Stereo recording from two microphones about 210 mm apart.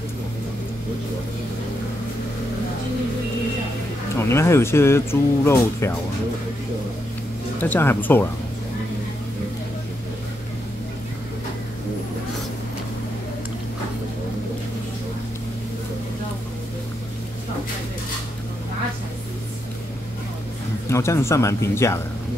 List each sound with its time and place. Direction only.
4.2 s speech: 10° left (ahead or behind)
7.6 s speech: 10° left (ahead or behind)
20.9 s speech: 15° left (ahead or behind)